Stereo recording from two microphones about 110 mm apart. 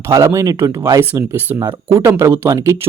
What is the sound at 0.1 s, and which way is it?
Speech, 30° right (ahead or behind).